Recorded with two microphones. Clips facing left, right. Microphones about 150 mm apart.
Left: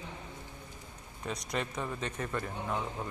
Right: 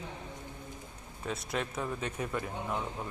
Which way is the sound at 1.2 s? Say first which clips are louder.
Right 1 dB; 5° right (ahead or behind).